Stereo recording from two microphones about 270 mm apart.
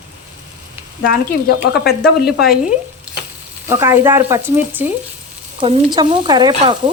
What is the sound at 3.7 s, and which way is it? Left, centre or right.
Speech, centre.